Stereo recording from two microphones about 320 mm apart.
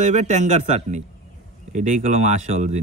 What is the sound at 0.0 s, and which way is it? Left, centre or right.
Speech, right.